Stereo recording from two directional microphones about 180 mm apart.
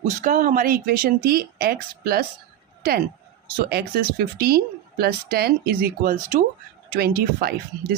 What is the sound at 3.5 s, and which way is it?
Speech, 60° right (ahead or behind).